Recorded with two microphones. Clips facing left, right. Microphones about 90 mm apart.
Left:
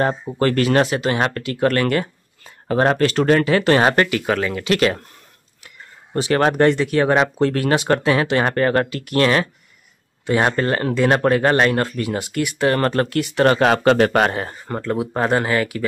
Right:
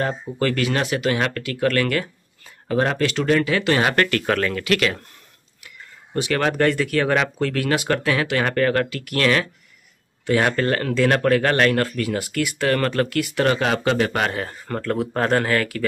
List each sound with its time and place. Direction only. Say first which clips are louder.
0.0 s speech: left 4 dB; 35° left (ahead or behind)
4.1 s speech: left 1 dB; 10° left (ahead or behind)
4.6 s speech: left 3 dB; 30° left (ahead or behind)
6.1 s speech: left 4 dB; 35° left (ahead or behind)
12.8 s speech: left 2 dB; 35° left (ahead or behind)
13.5 s speech: left 7 dB; 45° left (ahead or behind)
14.7 s speech: left 1 dB; 15° left (ahead or behind)